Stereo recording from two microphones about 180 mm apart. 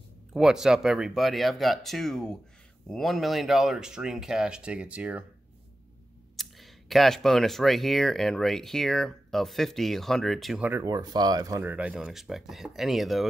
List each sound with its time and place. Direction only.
0.3 s speech: 5° right (ahead or behind)
6.3 s speech: centre (ahead or behind)
10.7 s speech: 20° right (ahead or behind)
11.7 s speech: 5° right (ahead or behind)